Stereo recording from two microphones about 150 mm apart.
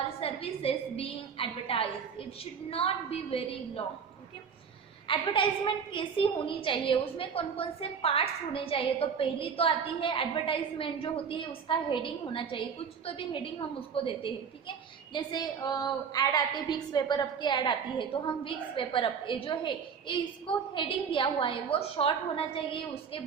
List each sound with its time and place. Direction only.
0.2 s a woman's voice: 40° left (ahead or behind)
5.0 s a woman's voice: 35° left (ahead or behind)